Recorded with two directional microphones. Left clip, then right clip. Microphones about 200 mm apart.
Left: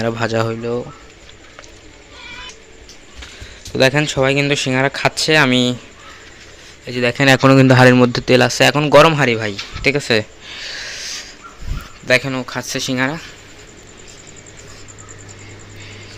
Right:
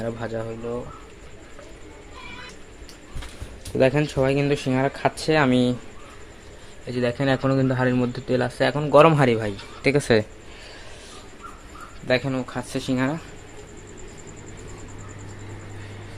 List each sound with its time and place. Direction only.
0.0 s speech: 20° left (ahead or behind)
3.8 s speech: 10° left (ahead or behind)
6.8 s speech: 15° left (ahead or behind)
9.0 s speech: 5° right (ahead or behind)
10.5 s a sound: 5° left (ahead or behind)
12.0 s speech: 5° left (ahead or behind)